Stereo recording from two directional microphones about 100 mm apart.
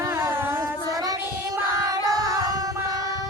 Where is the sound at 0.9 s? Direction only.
40° right (ahead or behind).